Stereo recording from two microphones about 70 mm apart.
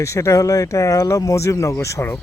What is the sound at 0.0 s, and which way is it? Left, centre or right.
Speech, left.